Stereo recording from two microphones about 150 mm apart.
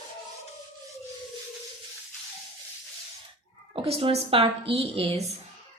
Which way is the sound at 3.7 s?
40° right (ahead or behind).